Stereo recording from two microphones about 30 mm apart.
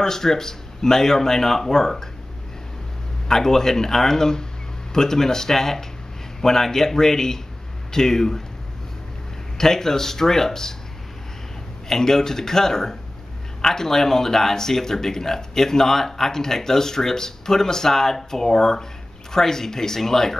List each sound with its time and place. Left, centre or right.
0.0 s speech: centre
3.3 s speech: centre
9.6 s speech: centre
11.9 s speech: centre